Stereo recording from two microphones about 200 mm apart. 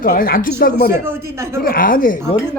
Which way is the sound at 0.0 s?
45° left (ahead or behind).